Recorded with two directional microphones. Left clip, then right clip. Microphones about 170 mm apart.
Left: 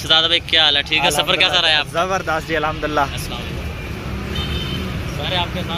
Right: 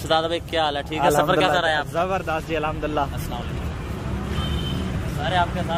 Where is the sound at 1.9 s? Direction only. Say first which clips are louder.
Left 4 dB; 5° right (ahead or behind).